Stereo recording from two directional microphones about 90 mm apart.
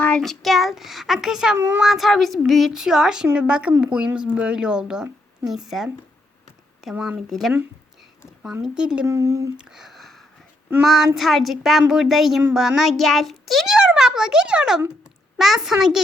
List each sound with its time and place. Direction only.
0.2 s a child's voice: centre (ahead or behind)
1.5 s speech: 25° right (ahead or behind)
1.8 s a child's voice: centre (ahead or behind)
6.9 s speech: 15° right (ahead or behind)
7.3 s a child's voice: centre (ahead or behind)
8.6 s speech: 10° right (ahead or behind)
9.0 s speech: 35° right (ahead or behind)
9.6 s a sound: 5° right (ahead or behind)
10.8 s a child's voice: centre (ahead or behind)